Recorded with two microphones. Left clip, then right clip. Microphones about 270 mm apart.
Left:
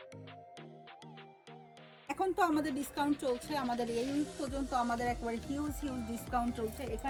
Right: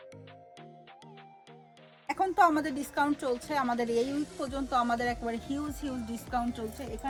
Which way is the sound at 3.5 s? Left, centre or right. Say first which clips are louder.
Right 6 dB; right.